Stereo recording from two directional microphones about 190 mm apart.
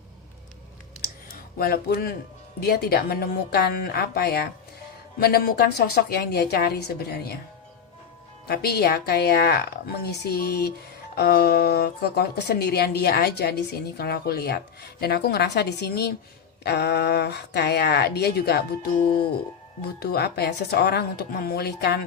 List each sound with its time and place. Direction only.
1.5 s a woman's voice: 50° left (ahead or behind)
8.4 s a woman's voice: 55° left (ahead or behind)